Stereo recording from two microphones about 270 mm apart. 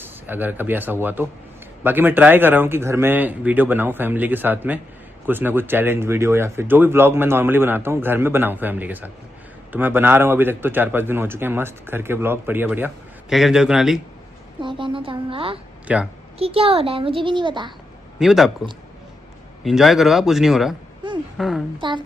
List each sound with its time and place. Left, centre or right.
0.0 s speech: centre
14.6 s a woman's voice: centre
15.9 s speech: centre
16.4 s a woman's voice: right
18.2 s speech: centre
19.6 s a woman's voice: centre
21.8 s speech: centre